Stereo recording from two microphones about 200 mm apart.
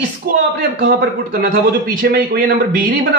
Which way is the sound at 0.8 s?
50° right (ahead or behind).